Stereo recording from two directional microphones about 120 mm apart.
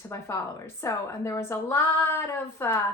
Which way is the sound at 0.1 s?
20° left (ahead or behind).